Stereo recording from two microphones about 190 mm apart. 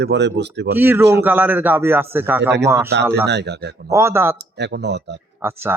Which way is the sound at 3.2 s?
60° right (ahead or behind).